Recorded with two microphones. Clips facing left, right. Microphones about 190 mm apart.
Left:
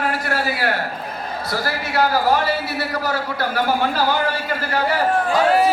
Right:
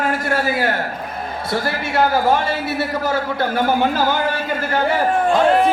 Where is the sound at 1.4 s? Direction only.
25° right (ahead or behind).